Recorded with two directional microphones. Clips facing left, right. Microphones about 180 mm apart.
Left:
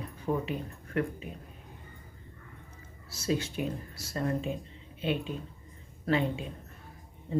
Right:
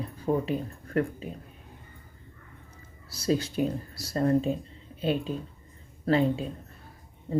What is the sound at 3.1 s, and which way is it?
Speech, 35° right (ahead or behind).